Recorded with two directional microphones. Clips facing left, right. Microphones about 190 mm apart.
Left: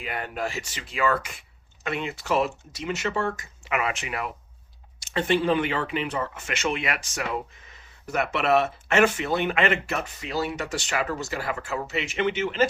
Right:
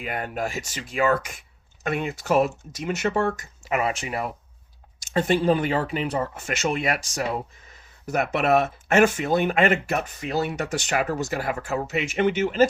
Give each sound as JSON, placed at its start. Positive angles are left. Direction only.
{"t": 0.0, "sound": "speech", "side_deg": -45}